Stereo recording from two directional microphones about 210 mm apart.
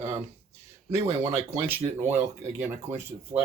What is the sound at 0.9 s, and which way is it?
Speech, 30° right (ahead or behind).